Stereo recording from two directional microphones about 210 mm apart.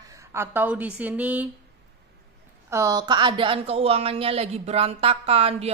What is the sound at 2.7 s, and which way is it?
Speech, 15° right (ahead or behind).